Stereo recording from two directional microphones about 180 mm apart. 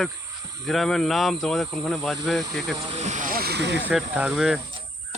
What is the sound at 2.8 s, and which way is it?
Speech, 35° right (ahead or behind).